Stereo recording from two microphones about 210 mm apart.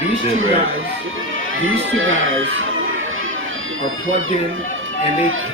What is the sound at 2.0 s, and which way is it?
Speech, 70° right (ahead or behind).